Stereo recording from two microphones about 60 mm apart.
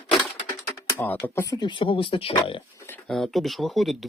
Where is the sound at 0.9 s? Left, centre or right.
Left.